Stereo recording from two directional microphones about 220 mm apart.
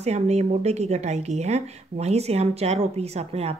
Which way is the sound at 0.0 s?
30° right (ahead or behind).